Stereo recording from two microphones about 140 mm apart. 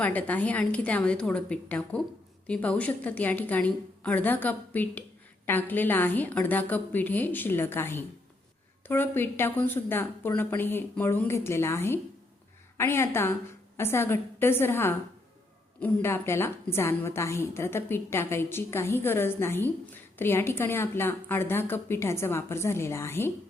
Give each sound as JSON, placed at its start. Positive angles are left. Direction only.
{"t": 0.0, "sound": "a woman's voice", "side_deg": 10}